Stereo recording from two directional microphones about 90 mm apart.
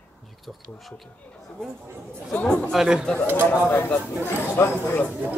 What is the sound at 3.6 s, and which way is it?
Speech, 20° left (ahead or behind).